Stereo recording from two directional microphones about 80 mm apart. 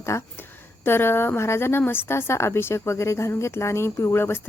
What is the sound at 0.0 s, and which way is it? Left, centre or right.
A woman's voice, left.